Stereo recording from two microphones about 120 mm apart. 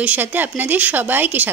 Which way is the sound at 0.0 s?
15° right (ahead or behind).